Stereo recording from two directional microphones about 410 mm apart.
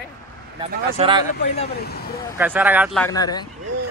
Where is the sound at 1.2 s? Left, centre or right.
Centre.